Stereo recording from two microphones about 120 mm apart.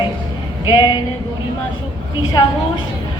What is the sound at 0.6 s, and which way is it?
Speech, 35° left (ahead or behind).